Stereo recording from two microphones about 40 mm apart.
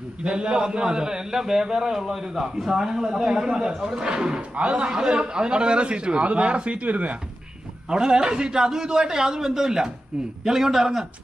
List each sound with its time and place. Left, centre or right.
0.2 s a man's voice: right
4.4 s a man's voice: right
7.9 s a man's voice: centre